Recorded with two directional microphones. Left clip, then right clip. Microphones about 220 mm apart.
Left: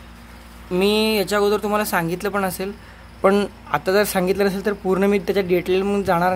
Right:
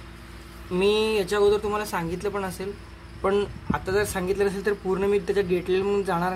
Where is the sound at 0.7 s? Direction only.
40° left (ahead or behind).